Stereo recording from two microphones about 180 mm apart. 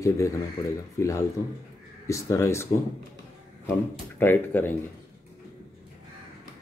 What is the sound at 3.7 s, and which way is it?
Speech, 10° left (ahead or behind).